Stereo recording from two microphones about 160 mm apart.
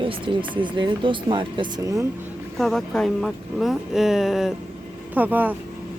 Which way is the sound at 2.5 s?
Centre (ahead or behind).